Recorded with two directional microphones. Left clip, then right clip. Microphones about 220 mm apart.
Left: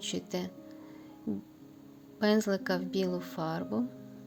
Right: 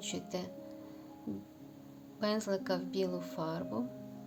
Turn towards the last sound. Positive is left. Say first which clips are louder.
# left 3 dB
turn(degrees=15)  # may be behind; listen again after turning